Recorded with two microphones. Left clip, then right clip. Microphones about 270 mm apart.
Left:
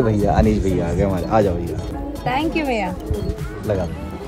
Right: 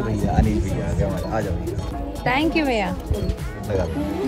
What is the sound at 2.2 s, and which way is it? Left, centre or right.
Speech, right.